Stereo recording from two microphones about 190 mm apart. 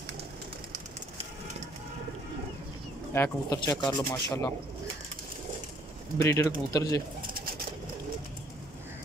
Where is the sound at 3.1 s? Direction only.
15° left (ahead or behind).